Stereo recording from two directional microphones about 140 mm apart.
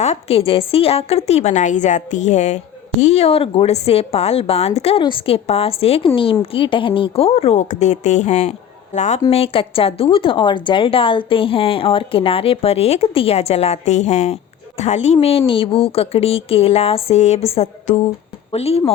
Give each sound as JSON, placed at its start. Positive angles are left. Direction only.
{"t": 0.0, "sound": "a woman's voice", "side_deg": 50}
{"t": 9.3, "sound": "a woman's voice", "side_deg": 45}